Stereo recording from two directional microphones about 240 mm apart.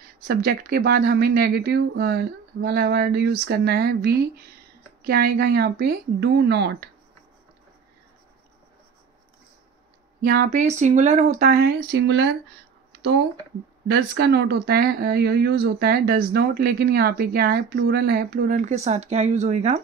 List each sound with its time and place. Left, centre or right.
0.3 s speech: right
10.2 s speech: right
11.9 s speech: right
13.9 s speech: right